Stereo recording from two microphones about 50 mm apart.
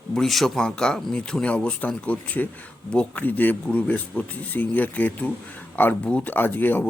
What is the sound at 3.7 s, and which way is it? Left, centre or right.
Speech, left.